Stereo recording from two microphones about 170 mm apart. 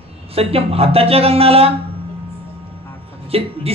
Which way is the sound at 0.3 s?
35° right (ahead or behind).